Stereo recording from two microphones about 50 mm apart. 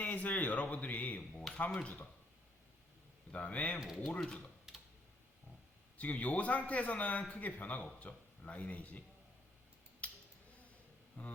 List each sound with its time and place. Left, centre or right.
0.0 s a man's voice: left
3.3 s a man's voice: left
3.8 s speech: centre
6.0 s a man's voice: left
10.0 s a sound: left
11.2 s a man's voice: left